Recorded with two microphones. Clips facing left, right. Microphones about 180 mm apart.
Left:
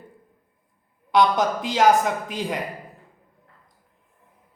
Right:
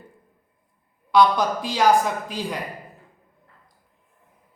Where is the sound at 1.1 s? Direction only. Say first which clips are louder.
Right 1 dB; 20° left (ahead or behind).